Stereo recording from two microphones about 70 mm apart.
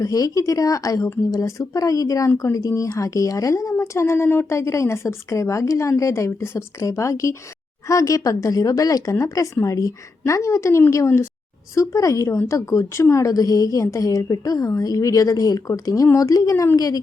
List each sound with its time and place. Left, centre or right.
0.0 s a woman's voice: left